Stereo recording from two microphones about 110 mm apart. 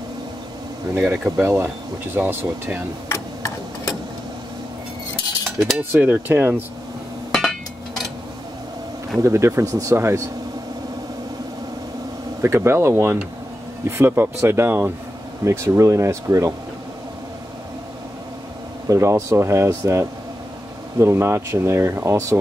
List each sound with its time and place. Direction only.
0.9 s cutlery: 15° right (ahead or behind)
1.3 s speech: 20° right (ahead or behind)
2.1 s cutlery: 15° right (ahead or behind)
3.1 s tick-tock: 30° left (ahead or behind)
5.8 s cutlery: 15° right (ahead or behind)
9.2 s speech: 25° right (ahead or behind)
12.4 s speech: 25° right (ahead or behind)
18.9 s speech: 30° right (ahead or behind)